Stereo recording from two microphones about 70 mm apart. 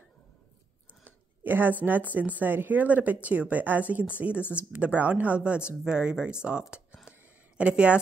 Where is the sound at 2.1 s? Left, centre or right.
Right.